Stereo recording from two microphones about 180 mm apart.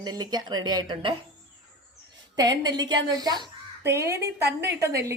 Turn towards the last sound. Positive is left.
turn(degrees=-15)  # may be behind; listen again after turning